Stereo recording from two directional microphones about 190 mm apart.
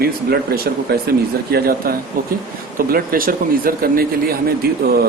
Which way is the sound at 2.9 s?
50° right (ahead or behind).